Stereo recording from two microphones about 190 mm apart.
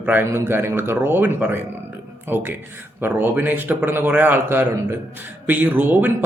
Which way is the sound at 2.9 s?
10° right (ahead or behind).